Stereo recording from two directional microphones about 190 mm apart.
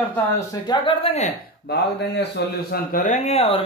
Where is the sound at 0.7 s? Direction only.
30° left (ahead or behind).